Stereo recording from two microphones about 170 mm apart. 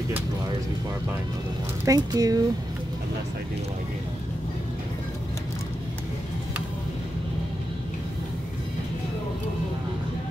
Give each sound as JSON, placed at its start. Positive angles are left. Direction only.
{"t": 1.9, "sound": "speech", "side_deg": -20}